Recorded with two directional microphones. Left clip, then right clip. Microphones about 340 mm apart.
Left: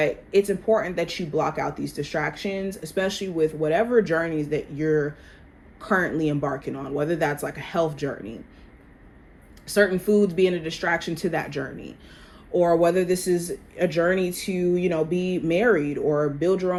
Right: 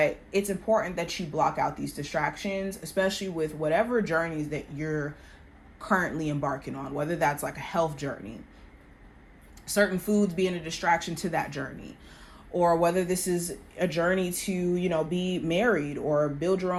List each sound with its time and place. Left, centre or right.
0.3 s speech: centre
9.6 s speech: centre